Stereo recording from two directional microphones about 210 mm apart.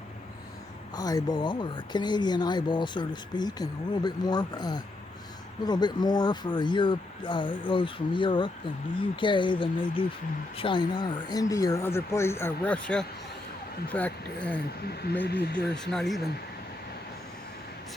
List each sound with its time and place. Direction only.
0.9 s speech: 20° left (ahead or behind)
15.3 s speech: 50° left (ahead or behind)
15.7 s speech: 5° left (ahead or behind)